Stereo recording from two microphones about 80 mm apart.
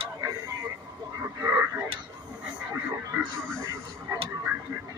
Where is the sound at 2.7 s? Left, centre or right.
Right.